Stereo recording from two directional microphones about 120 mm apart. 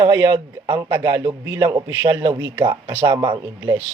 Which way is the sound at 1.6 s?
45° right (ahead or behind).